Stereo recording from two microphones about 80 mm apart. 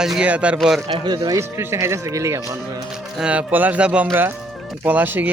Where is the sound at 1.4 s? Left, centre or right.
Right.